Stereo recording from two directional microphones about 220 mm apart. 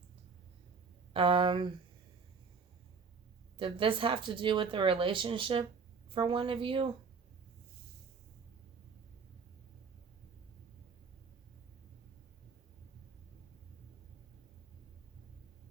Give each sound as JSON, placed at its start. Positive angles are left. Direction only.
{"t": 1.1, "sound": "speech", "side_deg": -25}
{"t": 3.6, "sound": "speech", "side_deg": -25}